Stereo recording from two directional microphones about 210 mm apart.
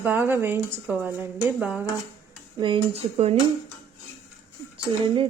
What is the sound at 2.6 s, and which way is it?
Speech, 25° right (ahead or behind).